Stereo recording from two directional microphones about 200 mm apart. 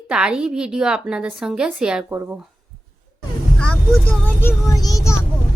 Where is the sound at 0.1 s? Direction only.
5° right (ahead or behind).